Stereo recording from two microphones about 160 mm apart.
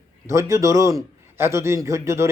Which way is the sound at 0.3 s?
20° right (ahead or behind).